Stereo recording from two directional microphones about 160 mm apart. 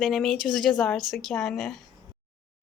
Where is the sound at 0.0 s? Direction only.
Centre (ahead or behind).